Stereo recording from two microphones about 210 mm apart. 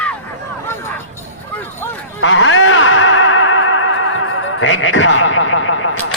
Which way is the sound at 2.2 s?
65° left (ahead or behind).